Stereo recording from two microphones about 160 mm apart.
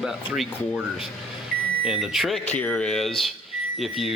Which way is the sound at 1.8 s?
5° right (ahead or behind).